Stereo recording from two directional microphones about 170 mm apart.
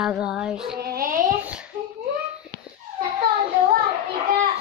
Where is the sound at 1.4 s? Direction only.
5° right (ahead or behind).